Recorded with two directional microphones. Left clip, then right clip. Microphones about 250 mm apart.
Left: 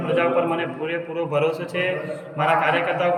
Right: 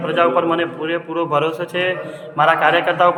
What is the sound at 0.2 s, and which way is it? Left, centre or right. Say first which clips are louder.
A man's voice: right 7 dB; centre.